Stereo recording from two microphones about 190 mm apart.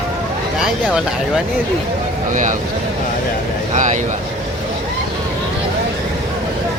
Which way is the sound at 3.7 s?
40° right (ahead or behind).